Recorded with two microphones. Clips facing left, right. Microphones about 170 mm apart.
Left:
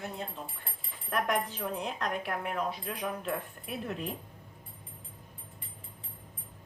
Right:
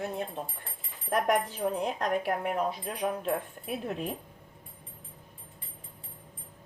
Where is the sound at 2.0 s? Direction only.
40° right (ahead or behind).